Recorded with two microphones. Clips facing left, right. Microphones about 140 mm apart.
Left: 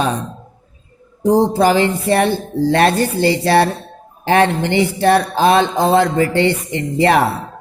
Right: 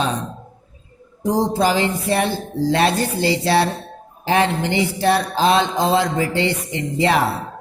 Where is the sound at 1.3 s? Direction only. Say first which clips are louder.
Left 5 dB; 60° left (ahead or behind).